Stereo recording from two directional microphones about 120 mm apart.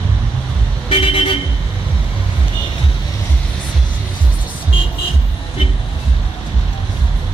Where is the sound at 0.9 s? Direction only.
50° left (ahead or behind).